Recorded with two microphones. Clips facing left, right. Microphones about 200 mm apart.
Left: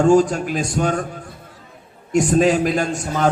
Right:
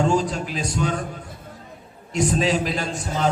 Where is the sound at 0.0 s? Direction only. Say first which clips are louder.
Left 7 dB; 50° left (ahead or behind).